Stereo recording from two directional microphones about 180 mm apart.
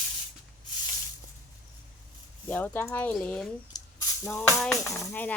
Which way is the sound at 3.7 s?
15° left (ahead or behind).